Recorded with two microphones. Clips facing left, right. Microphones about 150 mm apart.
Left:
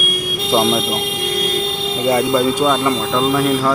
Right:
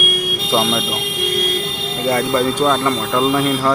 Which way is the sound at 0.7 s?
15° left (ahead or behind).